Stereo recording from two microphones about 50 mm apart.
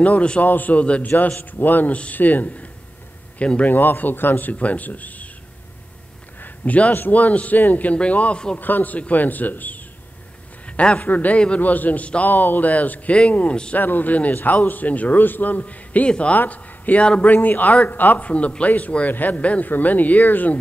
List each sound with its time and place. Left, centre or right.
0.0 s a man's voice: left
1.4 s a man's voice: left
3.6 s speech: left
6.4 s a sound: left
6.9 s speech: left
8.5 s speech: left
11.0 s a man's voice: left